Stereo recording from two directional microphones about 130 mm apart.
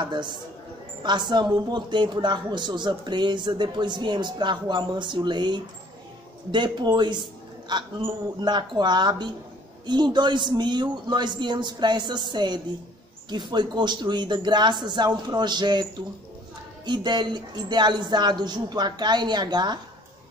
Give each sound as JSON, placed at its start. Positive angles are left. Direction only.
{"t": 0.0, "sound": "a woman's voice", "side_deg": -35}